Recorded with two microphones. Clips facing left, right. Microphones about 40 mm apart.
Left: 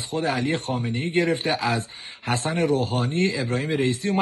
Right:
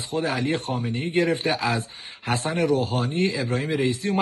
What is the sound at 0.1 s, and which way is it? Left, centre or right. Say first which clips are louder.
Speech: even; left.